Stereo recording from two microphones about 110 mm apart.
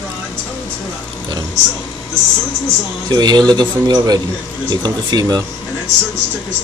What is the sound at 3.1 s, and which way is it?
Speech, 40° right (ahead or behind).